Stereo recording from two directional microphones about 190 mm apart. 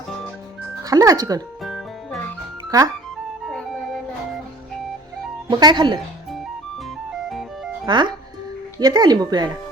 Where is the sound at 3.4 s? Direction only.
Centre (ahead or behind).